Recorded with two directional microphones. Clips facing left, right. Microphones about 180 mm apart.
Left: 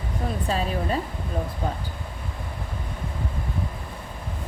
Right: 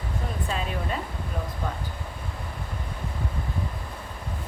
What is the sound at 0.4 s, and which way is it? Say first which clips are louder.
Speech: left 5 dB; 35° left (ahead or behind).